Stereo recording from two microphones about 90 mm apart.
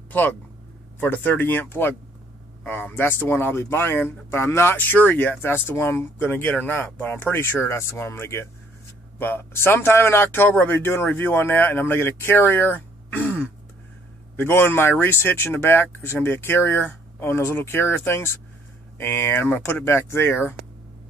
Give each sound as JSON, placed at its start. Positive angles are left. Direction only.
{"t": 0.9, "sound": "speech", "side_deg": 20}